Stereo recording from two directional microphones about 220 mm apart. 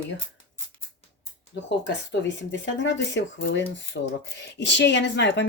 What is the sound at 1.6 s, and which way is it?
Speech, 55° left (ahead or behind).